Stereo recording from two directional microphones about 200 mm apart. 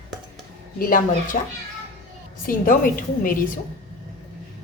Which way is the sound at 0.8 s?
45° left (ahead or behind).